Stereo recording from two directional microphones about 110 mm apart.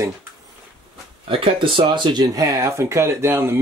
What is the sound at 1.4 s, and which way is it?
Speech, 50° right (ahead or behind).